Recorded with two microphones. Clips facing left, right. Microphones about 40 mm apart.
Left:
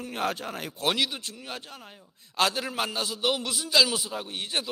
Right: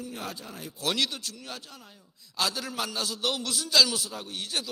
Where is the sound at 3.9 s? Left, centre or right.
Left.